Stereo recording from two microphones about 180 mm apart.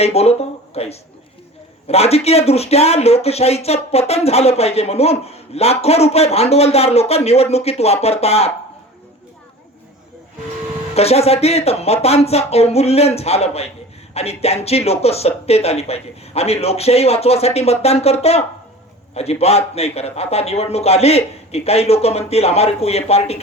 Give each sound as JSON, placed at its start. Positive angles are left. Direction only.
{"t": 0.0, "sound": "speech", "side_deg": 35}
{"t": 10.9, "sound": "speech", "side_deg": 35}